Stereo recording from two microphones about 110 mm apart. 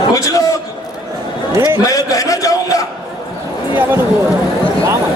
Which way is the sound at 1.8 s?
35° left (ahead or behind).